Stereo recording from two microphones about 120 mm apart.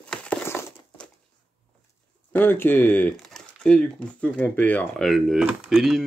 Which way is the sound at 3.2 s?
5° left (ahead or behind).